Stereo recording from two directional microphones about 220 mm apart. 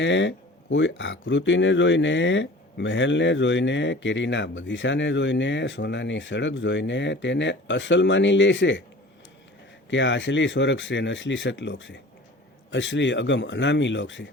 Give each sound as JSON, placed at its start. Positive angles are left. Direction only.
{"t": 0.0, "sound": "speech", "side_deg": 55}
{"t": 9.9, "sound": "speech", "side_deg": 55}